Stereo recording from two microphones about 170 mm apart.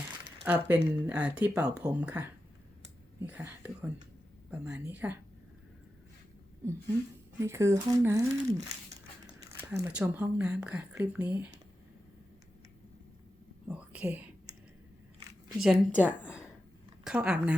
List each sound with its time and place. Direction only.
0.4 s speech: 10° right (ahead or behind)
7.3 s speech: 15° right (ahead or behind)
13.7 s speech: 5° right (ahead or behind)
15.5 s speech: 5° right (ahead or behind)
16.0 s a woman's voice: 10° left (ahead or behind)
17.0 s a woman's voice: 5° right (ahead or behind)